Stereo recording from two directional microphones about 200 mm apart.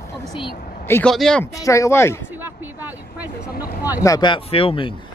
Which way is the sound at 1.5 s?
15° left (ahead or behind).